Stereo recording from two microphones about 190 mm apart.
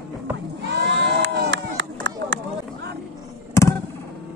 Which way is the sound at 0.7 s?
65° right (ahead or behind).